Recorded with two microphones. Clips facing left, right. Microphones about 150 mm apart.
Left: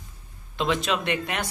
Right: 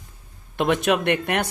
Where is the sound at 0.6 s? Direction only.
55° right (ahead or behind).